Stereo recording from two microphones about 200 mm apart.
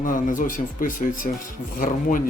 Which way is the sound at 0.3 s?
40° left (ahead or behind).